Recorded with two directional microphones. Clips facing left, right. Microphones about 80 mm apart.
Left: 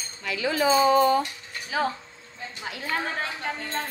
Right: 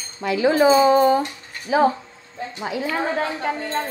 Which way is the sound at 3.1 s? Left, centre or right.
Centre.